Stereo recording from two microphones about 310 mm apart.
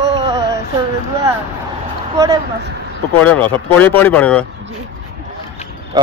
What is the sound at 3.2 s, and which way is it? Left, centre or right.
Speech, centre.